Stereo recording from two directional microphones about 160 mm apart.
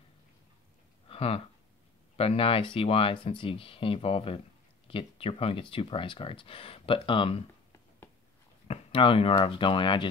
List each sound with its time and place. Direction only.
1.0 s a sound: 35° left (ahead or behind)
2.1 s speech: 35° left (ahead or behind)
8.6 s speech: 35° left (ahead or behind)